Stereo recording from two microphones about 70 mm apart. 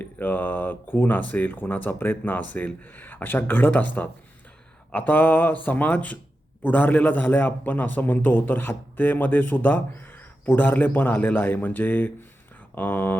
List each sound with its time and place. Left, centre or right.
0.0 s a man's voice: left